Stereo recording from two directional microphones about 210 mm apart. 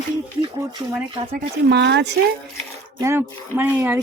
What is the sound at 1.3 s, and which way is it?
Speech, 55° right (ahead or behind).